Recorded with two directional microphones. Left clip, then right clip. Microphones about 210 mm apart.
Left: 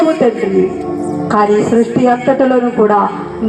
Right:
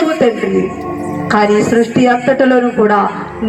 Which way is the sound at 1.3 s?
45° left (ahead or behind).